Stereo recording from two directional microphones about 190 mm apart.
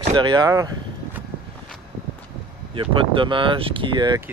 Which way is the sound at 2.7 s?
25° right (ahead or behind).